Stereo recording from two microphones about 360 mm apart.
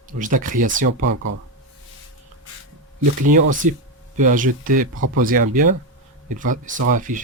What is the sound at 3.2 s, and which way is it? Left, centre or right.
Speech, right.